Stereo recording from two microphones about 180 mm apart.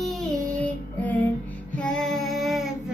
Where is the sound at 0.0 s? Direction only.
5° left (ahead or behind).